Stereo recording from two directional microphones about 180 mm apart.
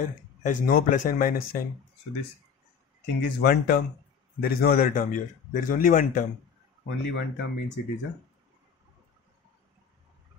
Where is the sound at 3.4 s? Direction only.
60° left (ahead or behind).